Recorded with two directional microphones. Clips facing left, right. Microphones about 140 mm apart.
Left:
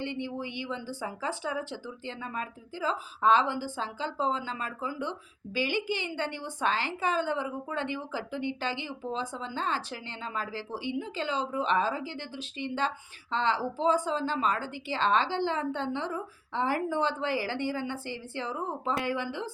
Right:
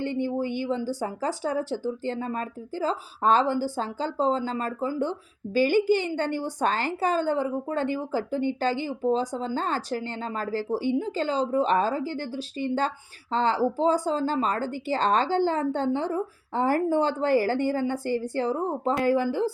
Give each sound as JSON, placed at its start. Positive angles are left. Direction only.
{"t": 0.0, "sound": "a woman's voice", "side_deg": -45}